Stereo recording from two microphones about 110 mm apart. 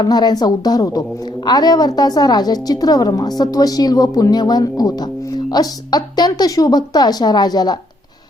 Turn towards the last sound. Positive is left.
turn(degrees=40)  # may be behind; listen again after turning